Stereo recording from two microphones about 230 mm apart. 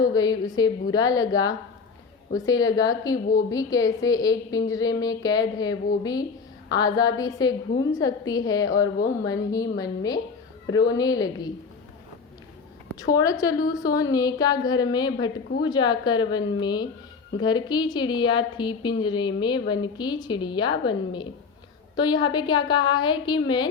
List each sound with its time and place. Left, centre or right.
0.0 s a woman's voice: centre
13.0 s a woman's voice: centre